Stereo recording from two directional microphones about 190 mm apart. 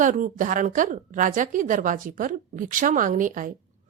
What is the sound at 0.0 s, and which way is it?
A woman's voice, 45° right (ahead or behind).